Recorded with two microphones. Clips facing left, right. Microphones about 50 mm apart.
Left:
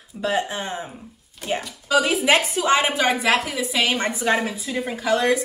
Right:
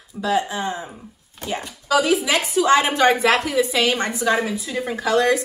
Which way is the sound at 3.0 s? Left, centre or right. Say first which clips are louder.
Right 3 dB; centre.